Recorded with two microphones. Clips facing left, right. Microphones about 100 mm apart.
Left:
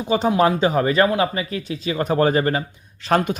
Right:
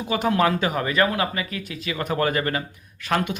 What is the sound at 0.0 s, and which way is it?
Speech, 25° left (ahead or behind).